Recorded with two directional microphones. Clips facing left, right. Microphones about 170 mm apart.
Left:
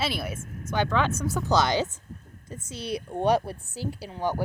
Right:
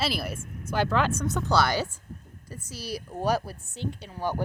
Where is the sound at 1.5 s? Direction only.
20° left (ahead or behind).